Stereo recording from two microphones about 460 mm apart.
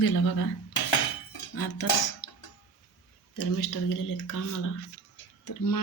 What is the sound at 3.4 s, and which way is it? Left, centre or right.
Speech, left.